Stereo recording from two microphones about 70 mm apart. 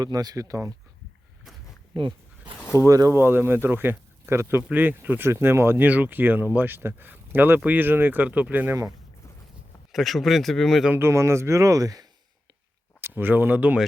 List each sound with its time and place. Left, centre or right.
0.0 s speech: right
2.7 s speech: right
3.2 s speech: right
4.7 s speech: right
5.8 s speech: right
9.9 s speech: centre
10.9 s speech: right
13.0 s speech: right